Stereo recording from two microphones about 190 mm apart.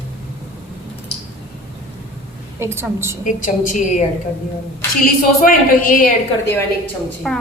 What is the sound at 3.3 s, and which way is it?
Speech, 45° left (ahead or behind).